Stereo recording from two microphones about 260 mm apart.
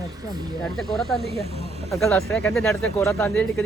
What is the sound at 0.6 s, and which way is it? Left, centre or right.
Speech, centre.